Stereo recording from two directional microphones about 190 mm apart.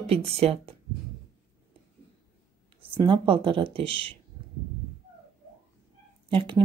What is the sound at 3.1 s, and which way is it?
Speech, 25° right (ahead or behind).